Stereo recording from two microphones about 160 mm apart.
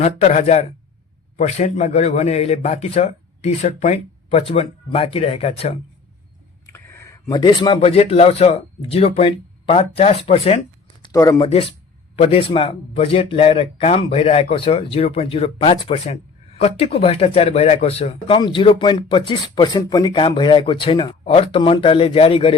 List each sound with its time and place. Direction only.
0.0 s speech: 45° left (ahead or behind)
6.7 s speech: 15° left (ahead or behind); by 10.6 s 40° left (ahead or behind)
11.0 s a sound: 20° left (ahead or behind)
11.3 s speech: 35° left (ahead or behind)